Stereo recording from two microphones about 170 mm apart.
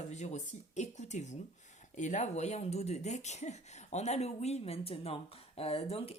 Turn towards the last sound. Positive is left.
turn(degrees=35)  # may be behind; listen again after turning